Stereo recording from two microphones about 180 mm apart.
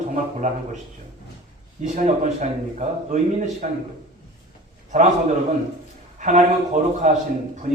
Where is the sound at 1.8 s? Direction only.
40° right (ahead or behind).